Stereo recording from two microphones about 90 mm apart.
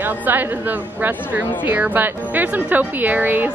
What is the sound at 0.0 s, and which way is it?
A woman's voice, 20° right (ahead or behind).